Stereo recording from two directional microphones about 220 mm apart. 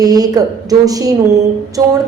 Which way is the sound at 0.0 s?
15° right (ahead or behind).